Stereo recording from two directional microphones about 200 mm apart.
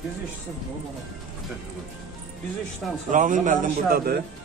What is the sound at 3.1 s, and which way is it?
A man's voice, 40° right (ahead or behind).